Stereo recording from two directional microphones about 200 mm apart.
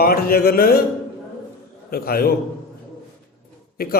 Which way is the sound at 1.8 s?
50° left (ahead or behind).